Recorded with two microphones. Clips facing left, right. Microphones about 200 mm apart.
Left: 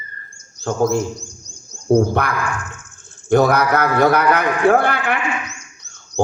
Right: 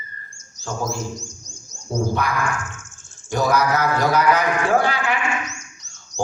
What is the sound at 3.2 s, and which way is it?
Speech, 60° left (ahead or behind).